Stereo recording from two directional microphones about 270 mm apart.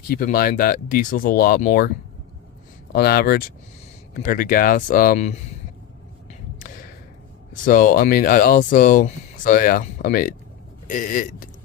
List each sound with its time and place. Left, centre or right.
0.1 s speech: left
2.9 s speech: left
7.6 s speech: left